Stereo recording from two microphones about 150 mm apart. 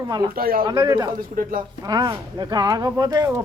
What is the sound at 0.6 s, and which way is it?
Speech, 25° right (ahead or behind).